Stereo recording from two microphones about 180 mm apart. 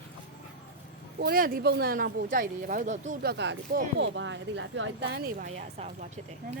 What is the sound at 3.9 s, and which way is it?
Speech, 85° right.